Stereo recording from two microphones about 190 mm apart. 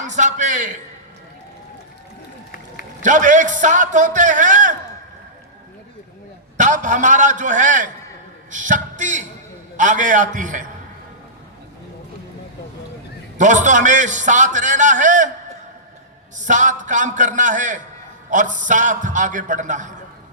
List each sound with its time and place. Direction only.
0.0 s a man's voice: 40° right (ahead or behind)
3.0 s a man's voice: 40° right (ahead or behind)
6.6 s a man's voice: 40° right (ahead or behind)
13.4 s a man's voice: 40° right (ahead or behind)
16.4 s a man's voice: 40° right (ahead or behind)